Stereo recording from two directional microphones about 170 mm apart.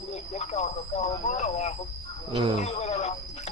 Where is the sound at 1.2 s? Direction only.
40° left (ahead or behind).